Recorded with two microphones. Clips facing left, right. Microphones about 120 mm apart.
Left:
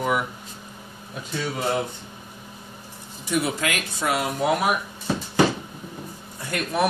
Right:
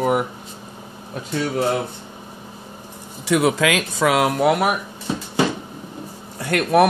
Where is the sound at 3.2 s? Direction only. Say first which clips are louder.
Right 7 dB; 90° right.